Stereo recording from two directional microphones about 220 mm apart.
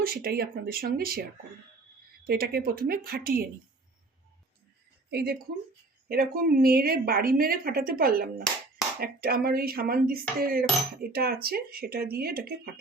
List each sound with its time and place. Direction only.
0.0 s a woman's voice: 45° right (ahead or behind)
2.2 s a woman's voice: 45° right (ahead or behind)
5.1 s a woman's voice: 45° right (ahead or behind)